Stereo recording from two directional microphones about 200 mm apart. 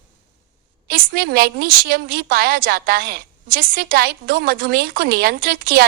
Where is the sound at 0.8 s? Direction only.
50° right (ahead or behind).